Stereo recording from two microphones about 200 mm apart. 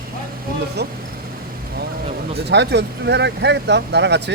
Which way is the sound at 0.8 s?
55° right (ahead or behind).